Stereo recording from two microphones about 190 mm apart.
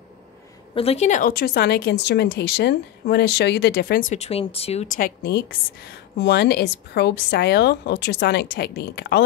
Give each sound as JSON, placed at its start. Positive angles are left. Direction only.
{"t": 0.7, "sound": "speech", "side_deg": 35}
{"t": 4.1, "sound": "speech", "side_deg": 35}